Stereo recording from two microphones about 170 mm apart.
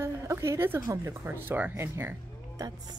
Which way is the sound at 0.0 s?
15° right (ahead or behind).